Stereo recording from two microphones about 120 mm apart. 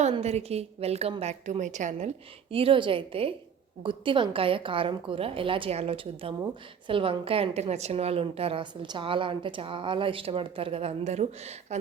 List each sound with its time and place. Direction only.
0.2 s a woman's voice: 60° right (ahead or behind)
1.2 s a woman's voice: 75° right (ahead or behind)
2.5 s a woman's voice: 50° right (ahead or behind); by 11.8 s 65° right (ahead or behind)